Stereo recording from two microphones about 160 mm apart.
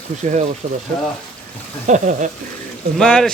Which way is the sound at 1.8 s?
50° right (ahead or behind).